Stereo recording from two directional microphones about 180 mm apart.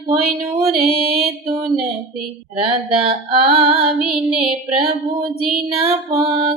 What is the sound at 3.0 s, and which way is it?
Music, 30° right (ahead or behind).